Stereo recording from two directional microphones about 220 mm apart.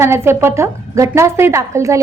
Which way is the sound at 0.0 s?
10° right (ahead or behind).